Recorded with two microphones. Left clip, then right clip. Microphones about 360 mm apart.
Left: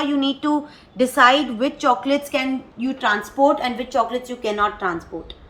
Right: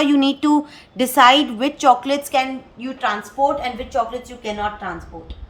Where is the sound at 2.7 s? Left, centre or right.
Centre.